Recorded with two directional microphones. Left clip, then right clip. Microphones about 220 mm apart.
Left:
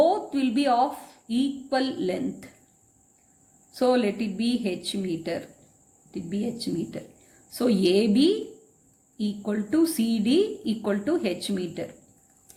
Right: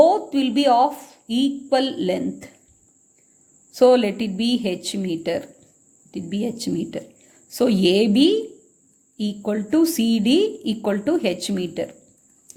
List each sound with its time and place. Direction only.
0.0 s a woman's voice: 35° right (ahead or behind)
3.7 s speech: 35° right (ahead or behind)
12.5 s a sound: 35° right (ahead or behind)